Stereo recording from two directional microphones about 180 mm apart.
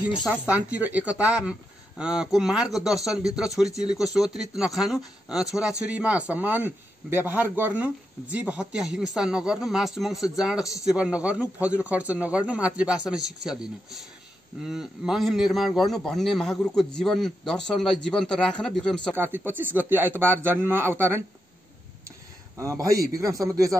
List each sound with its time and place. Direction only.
0.2 s a man's voice: 5° right (ahead or behind)
14.7 s speech: centre (ahead or behind)
19.1 s a man's voice: 10° right (ahead or behind)
22.6 s a man's voice: 15° right (ahead or behind)